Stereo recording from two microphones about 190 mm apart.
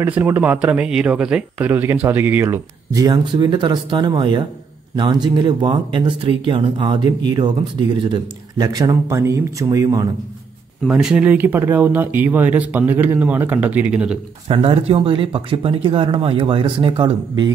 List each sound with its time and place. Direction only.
0.0 s speech: 10° right (ahead or behind)
10.9 s speech: 5° right (ahead or behind)
14.5 s speech: 30° right (ahead or behind)